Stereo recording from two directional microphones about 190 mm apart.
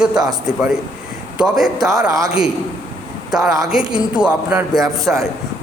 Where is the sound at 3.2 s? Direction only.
Centre (ahead or behind).